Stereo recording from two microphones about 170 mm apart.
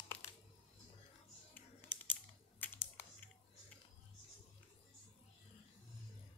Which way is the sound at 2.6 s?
10° left (ahead or behind).